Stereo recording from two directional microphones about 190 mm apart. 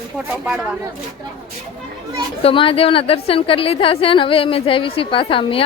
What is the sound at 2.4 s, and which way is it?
A woman's voice, 25° left (ahead or behind).